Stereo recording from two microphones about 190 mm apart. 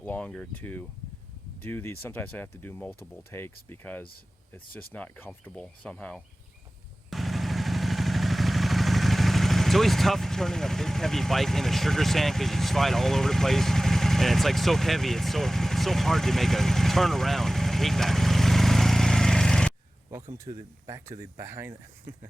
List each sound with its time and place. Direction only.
0.0 s speech: 5° left (ahead or behind)
7.1 s vehicle: centre (ahead or behind)
20.4 s speech: 15° right (ahead or behind)